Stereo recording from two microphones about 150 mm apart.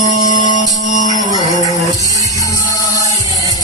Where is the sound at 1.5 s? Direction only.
25° right (ahead or behind).